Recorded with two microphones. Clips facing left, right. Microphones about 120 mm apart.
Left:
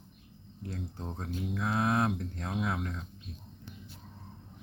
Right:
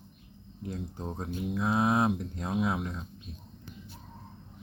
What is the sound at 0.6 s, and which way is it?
Speech, 15° right (ahead or behind).